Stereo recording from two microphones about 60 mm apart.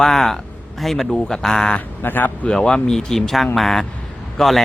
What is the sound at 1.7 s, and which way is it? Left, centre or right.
Speech, left.